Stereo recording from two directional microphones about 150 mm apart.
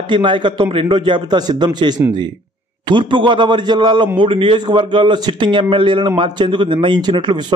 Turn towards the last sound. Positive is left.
turn(degrees=-30)  # may be behind; listen again after turning